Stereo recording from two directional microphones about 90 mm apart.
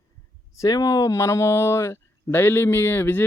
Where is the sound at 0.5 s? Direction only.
40° left (ahead or behind).